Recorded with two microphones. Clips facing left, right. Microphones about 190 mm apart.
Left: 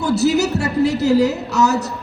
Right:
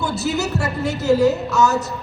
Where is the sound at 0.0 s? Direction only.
35° left (ahead or behind).